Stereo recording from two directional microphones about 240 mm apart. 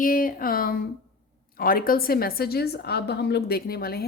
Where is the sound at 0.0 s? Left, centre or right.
Left.